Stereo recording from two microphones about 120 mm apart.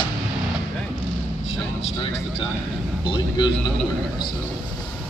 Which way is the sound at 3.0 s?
40° left (ahead or behind).